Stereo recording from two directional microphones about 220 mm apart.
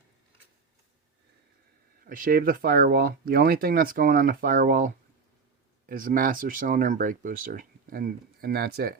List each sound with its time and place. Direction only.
2.0 s speech: 40° right (ahead or behind)